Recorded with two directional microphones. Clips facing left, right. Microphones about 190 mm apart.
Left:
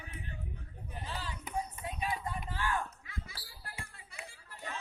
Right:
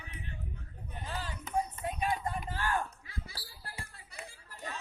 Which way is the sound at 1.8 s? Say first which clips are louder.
Right 4 dB; 50° right (ahead or behind).